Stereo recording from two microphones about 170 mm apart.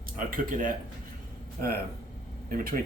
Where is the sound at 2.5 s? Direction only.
55° right (ahead or behind).